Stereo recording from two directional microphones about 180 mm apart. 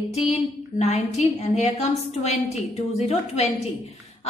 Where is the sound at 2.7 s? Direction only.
35° left (ahead or behind).